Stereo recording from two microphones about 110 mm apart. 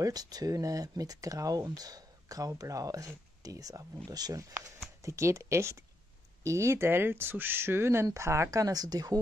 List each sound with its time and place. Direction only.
0.0 s speech: 35° right (ahead or behind)